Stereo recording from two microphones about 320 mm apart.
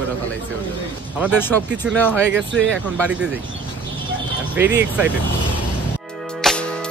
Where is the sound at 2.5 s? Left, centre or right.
Right.